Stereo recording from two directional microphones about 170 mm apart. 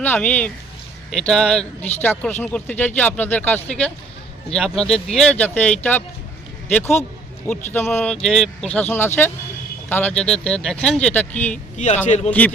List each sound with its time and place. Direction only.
0.0 s a man's voice: 10° left (ahead or behind)
12.0 s speech: 45° left (ahead or behind)